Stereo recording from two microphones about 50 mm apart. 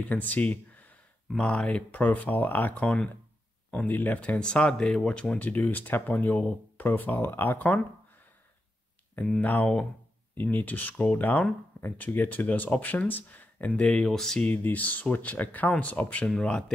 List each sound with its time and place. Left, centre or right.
0.0 s speech: left
1.3 s speech: centre
1.9 s speech: left
9.4 s speech: left
13.9 s speech: centre
14.4 s speech: left